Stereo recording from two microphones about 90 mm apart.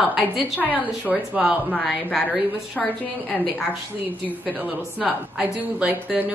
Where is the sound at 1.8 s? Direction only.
Centre (ahead or behind).